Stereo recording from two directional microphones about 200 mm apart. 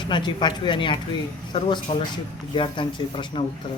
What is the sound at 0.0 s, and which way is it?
Speech, 25° left (ahead or behind).